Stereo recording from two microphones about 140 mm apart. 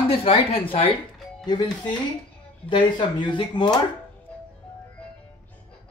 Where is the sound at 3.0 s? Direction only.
35° left (ahead or behind).